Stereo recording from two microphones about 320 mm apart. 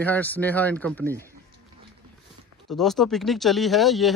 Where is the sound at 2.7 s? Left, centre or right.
Centre.